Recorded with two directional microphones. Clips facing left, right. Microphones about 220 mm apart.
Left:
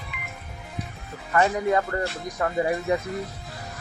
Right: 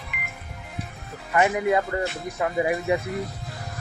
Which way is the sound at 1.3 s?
15° right (ahead or behind).